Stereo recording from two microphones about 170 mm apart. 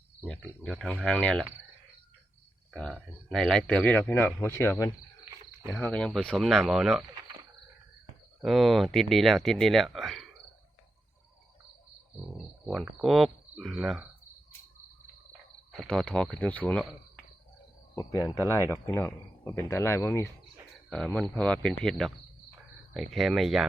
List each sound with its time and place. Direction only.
0.6 s speech: 5° left (ahead or behind)
2.7 s speech: 5° left (ahead or behind)
8.4 s speech: centre (ahead or behind)
12.6 s speech: centre (ahead or behind)
15.8 s speech: 5° left (ahead or behind)
17.9 s speech: 20° left (ahead or behind)
20.9 s speech: 5° left (ahead or behind)